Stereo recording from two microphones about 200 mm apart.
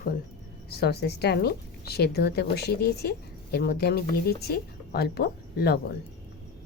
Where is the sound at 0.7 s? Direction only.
55° left (ahead or behind).